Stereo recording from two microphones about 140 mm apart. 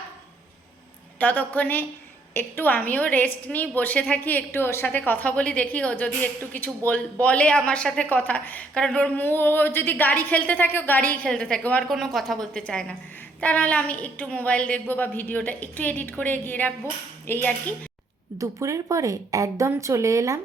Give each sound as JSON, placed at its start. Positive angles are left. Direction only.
{"t": 1.2, "sound": "a woman's voice", "side_deg": 10}
{"t": 18.3, "sound": "speech", "side_deg": -20}